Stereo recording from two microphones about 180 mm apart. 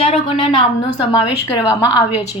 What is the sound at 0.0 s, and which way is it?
A woman's voice, 30° left (ahead or behind).